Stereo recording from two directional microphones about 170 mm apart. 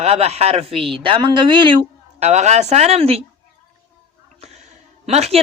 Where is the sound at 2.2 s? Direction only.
40° right (ahead or behind).